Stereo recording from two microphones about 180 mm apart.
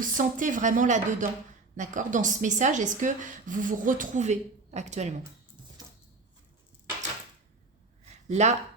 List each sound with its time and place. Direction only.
0.0 s speech: 45° right (ahead or behind)
8.3 s speech: 40° right (ahead or behind)